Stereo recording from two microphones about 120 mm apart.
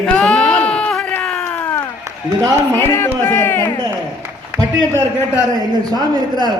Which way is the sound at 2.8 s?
20° left (ahead or behind).